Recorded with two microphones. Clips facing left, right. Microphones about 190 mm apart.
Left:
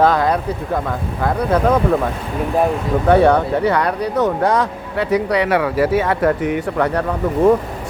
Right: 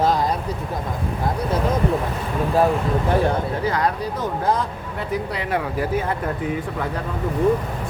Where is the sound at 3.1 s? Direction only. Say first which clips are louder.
Left 10 dB; 75° left (ahead or behind).